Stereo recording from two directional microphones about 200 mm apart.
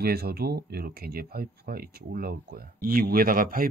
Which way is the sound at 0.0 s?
50° right (ahead or behind).